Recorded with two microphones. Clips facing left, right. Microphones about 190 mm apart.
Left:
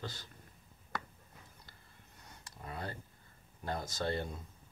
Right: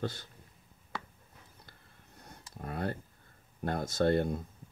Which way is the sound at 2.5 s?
55° right (ahead or behind).